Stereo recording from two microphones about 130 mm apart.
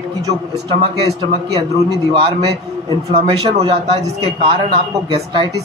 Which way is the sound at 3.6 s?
50° right (ahead or behind).